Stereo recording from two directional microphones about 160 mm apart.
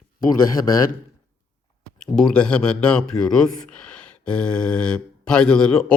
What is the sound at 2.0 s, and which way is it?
Speech, 5° left (ahead or behind).